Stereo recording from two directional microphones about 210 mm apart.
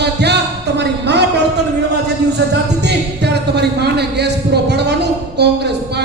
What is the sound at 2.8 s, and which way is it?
Speech, 55° right (ahead or behind).